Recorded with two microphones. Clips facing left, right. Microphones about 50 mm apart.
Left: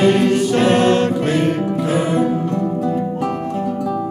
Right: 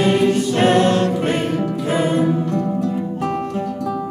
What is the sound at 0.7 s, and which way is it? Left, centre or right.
Choir, left.